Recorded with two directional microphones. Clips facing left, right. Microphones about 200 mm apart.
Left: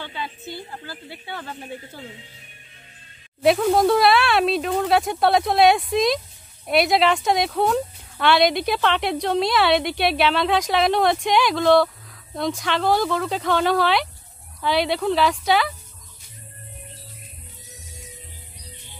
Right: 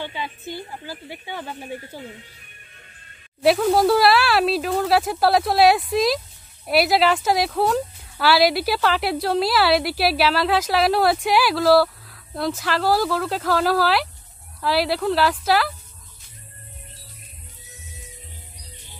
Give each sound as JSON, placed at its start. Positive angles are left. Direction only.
{"t": 0.0, "sound": "speech", "side_deg": -15}
{"t": 3.4, "sound": "speech", "side_deg": 0}